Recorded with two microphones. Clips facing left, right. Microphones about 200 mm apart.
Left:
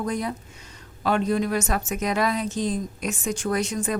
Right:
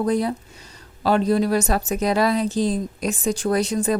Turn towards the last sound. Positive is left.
turn(degrees=-35)  # may be behind; listen again after turning